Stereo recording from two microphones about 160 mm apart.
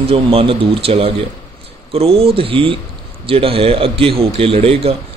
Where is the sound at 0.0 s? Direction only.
35° right (ahead or behind).